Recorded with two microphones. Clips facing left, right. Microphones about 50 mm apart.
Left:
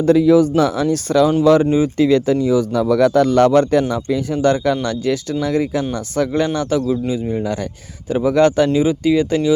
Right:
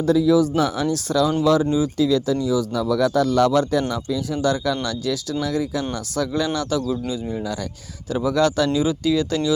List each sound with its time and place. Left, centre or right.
0.0 s speech: left
3.1 s speech: left
6.8 s speech: centre